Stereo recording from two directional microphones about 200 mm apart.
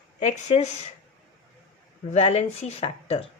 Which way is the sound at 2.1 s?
35° left (ahead or behind).